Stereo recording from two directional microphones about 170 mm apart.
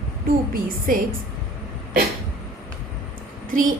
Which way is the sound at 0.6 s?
55° right (ahead or behind).